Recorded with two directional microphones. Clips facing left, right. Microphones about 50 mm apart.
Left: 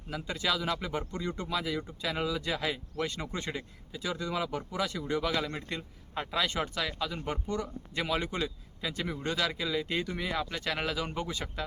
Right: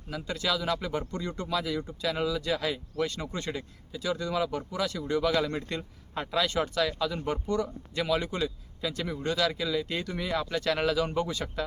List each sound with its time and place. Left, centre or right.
0.1 s speech: centre